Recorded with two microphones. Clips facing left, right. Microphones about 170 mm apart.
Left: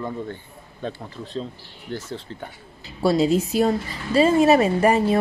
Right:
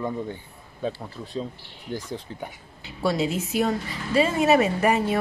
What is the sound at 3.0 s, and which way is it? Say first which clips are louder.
A woman's voice: left 6 dB; 35° left (ahead or behind).